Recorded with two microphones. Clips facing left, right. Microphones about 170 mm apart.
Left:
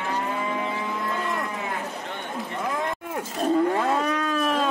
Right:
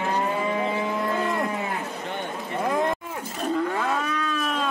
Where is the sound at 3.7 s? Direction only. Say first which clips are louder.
Left 3 dB; 35° left (ahead or behind).